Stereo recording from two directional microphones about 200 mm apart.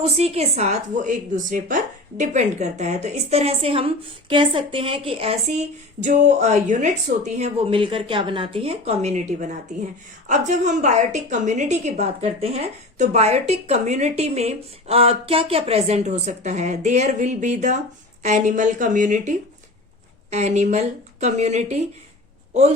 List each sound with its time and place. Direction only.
0.0 s a woman's voice: 30° right (ahead or behind)